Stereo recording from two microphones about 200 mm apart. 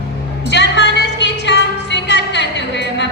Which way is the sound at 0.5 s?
60° left (ahead or behind).